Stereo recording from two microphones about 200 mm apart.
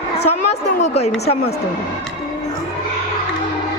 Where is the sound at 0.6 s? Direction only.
35° left (ahead or behind).